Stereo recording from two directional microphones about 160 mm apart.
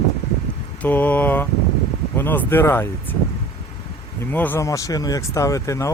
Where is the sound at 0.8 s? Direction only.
10° left (ahead or behind).